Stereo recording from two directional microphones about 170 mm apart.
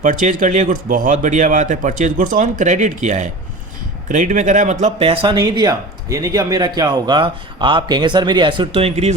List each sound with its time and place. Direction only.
0.0 s speech: 50° right (ahead or behind)